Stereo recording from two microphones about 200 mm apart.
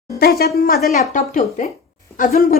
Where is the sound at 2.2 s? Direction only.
45° left (ahead or behind).